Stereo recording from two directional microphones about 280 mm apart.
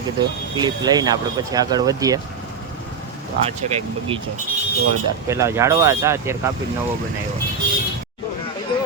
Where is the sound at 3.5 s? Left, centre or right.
Right.